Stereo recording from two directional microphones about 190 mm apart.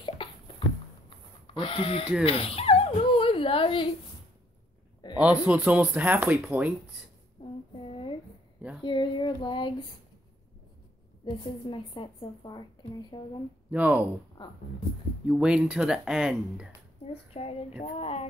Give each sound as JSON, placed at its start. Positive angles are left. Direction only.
{"t": 0.0, "sound": "a sound", "side_deg": 25}
{"t": 1.5, "sound": "a woman's voice", "side_deg": 30}
{"t": 2.2, "sound": "a sound", "side_deg": 30}
{"t": 5.1, "sound": "speech", "side_deg": -5}
{"t": 7.4, "sound": "female singing", "side_deg": 25}
{"t": 8.8, "sound": "a woman's voice", "side_deg": 25}
{"t": 11.2, "sound": "a woman's voice", "side_deg": 25}
{"t": 13.7, "sound": "speech", "side_deg": -10}
{"t": 14.4, "sound": "a woman's voice", "side_deg": 20}
{"t": 15.2, "sound": "speech", "side_deg": -5}
{"t": 17.1, "sound": "speech", "side_deg": 30}